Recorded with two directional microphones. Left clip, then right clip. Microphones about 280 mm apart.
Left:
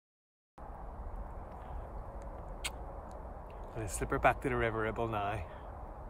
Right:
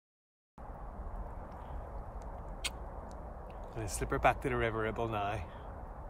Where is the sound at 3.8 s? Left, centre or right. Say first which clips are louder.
Even; centre.